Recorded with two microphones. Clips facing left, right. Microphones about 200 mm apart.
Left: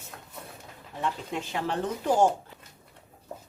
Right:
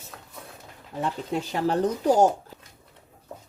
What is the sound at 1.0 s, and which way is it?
Speech, 35° right (ahead or behind).